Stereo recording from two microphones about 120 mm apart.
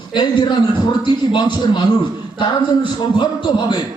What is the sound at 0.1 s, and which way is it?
A man's voice, 40° left (ahead or behind).